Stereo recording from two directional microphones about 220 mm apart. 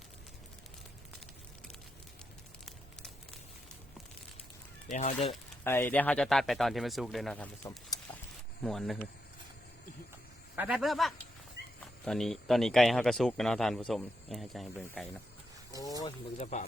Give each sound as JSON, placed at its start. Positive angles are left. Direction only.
{"t": 4.9, "sound": "speech", "side_deg": 30}
{"t": 5.6, "sound": "speech", "side_deg": 10}
{"t": 10.5, "sound": "speech", "side_deg": -5}
{"t": 15.8, "sound": "speech", "side_deg": 15}
{"t": 16.4, "sound": "speech", "side_deg": 35}